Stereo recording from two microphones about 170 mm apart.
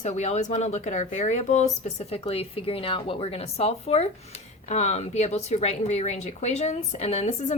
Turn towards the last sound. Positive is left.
turn(degrees=40)  # may be behind; listen again after turning